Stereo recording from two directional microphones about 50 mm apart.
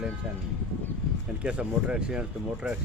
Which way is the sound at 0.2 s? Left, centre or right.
Right.